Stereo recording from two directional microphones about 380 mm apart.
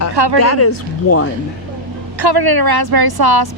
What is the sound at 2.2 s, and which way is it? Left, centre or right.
Speech, right.